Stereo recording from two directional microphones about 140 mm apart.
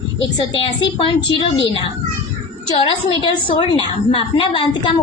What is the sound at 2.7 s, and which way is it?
A woman's voice, 35° left (ahead or behind).